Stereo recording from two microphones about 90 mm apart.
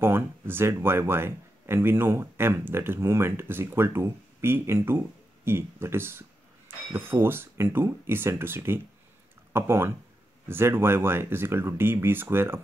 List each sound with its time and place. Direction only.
0.0 s speech: 25° right (ahead or behind)